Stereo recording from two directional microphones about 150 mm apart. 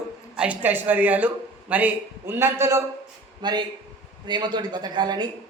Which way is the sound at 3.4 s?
30° right (ahead or behind).